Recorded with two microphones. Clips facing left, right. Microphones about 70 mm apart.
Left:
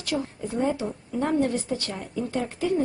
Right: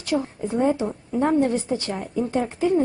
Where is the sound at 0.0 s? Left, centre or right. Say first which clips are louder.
Right 4 dB; right.